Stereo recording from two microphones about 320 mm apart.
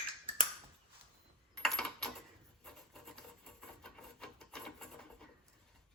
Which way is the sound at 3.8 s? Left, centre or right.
Centre.